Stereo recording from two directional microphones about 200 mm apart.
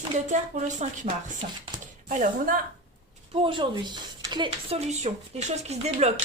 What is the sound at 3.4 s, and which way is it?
Speech, 25° right (ahead or behind).